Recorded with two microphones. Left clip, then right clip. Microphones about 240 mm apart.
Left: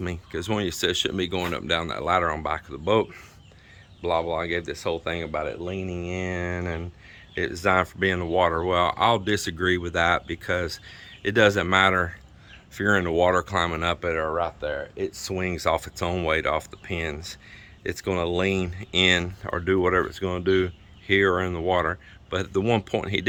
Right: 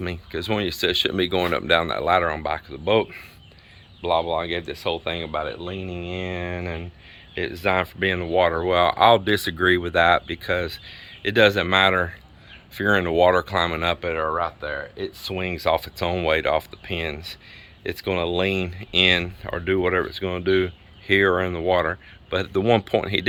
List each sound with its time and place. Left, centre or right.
0.0 s speech: centre